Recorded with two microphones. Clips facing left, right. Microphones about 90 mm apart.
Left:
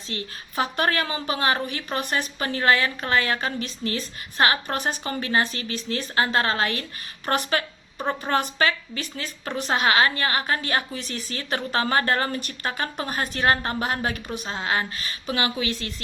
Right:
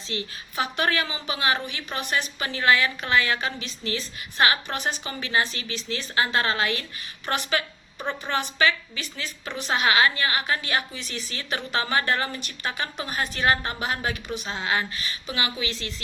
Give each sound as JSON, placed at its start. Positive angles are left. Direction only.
{"t": 0.1, "sound": "a woman's voice", "side_deg": 45}